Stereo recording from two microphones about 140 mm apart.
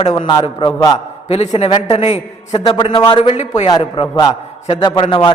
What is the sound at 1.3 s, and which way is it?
A man's voice, 45° left (ahead or behind).